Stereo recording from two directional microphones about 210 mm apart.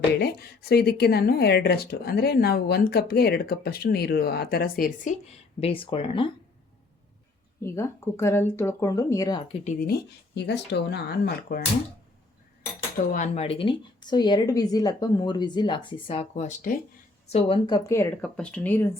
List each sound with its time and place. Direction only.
0.2 s speech: 50° left (ahead or behind)
5.5 s a woman's voice: 25° left (ahead or behind)
7.6 s speech: 10° left (ahead or behind)
9.6 s speech: 45° left (ahead or behind)
13.1 s a woman's voice: 35° left (ahead or behind)
17.8 s speech: 15° left (ahead or behind)